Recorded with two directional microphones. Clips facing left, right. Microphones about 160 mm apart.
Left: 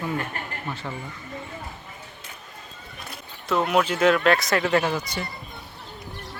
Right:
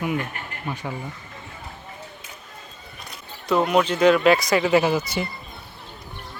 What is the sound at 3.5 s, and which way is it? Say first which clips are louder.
Speech: right 2 dB; centre (ahead or behind).